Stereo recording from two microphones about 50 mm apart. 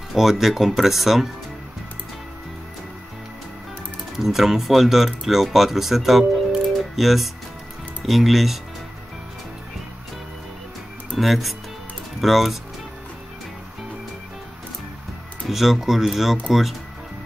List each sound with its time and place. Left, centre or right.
0.1 s speech: centre
4.2 s speech: centre
6.8 s music: centre
8.0 s speech: centre
11.1 s speech: centre
15.4 s speech: centre